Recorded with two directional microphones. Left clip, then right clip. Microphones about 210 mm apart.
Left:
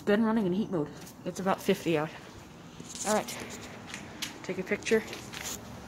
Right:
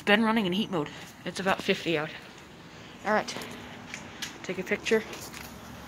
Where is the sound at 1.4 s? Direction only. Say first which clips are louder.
Right 1 dB; 25° left (ahead or behind).